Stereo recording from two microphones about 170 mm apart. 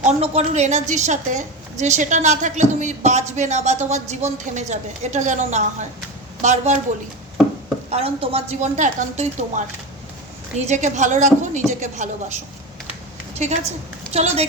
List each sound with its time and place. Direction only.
0.0 s a woman's voice: 40° right (ahead or behind)
7.9 s speech: 35° right (ahead or behind)
10.7 s a woman's voice: 45° right (ahead or behind)